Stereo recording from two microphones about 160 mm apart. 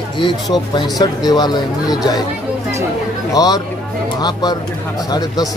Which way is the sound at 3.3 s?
25° left (ahead or behind).